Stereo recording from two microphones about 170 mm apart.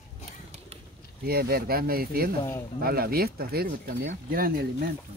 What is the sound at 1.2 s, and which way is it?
Speech, 65° right (ahead or behind).